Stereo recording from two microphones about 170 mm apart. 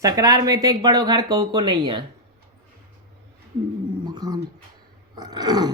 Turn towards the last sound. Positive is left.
turn(degrees=-25)  # may be behind; listen again after turning